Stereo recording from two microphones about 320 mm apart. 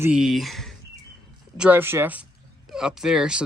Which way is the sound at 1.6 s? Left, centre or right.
Centre.